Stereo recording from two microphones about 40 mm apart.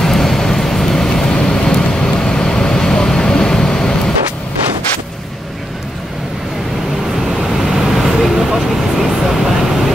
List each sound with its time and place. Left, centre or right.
0.0 s vehicle: centre
7.2 s vehicle: centre